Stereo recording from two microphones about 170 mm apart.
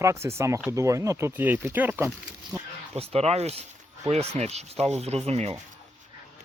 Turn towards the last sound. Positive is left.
turn(degrees=-40)  # may be behind; listen again after turning